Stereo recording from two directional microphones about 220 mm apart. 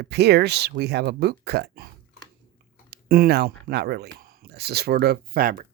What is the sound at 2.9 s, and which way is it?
Speech, 45° right (ahead or behind).